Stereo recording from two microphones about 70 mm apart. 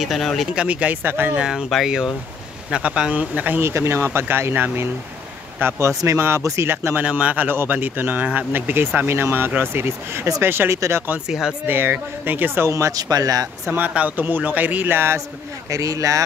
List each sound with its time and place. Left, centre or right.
0.0 s speech: centre
0.6 s speech: centre
1.0 s speech: right
1.3 s speech: centre
2.7 s speech: centre
3.6 s speech: right
5.9 s speech: right
7.0 s speech: centre; by 11.1 s right
11.2 s speech: centre
11.6 s speech: right
12.9 s speech: right
13.7 s speech: right
15.7 s speech: right